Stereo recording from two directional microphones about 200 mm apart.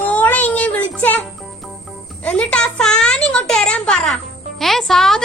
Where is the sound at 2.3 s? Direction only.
5° left (ahead or behind).